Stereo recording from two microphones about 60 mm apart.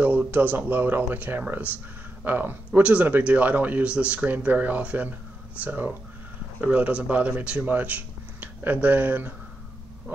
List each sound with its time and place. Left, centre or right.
0.0 s speech: right